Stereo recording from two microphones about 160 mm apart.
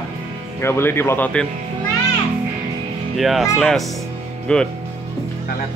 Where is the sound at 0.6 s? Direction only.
15° left (ahead or behind).